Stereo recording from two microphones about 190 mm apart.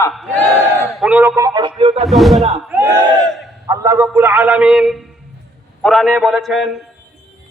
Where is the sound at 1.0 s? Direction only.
10° right (ahead or behind).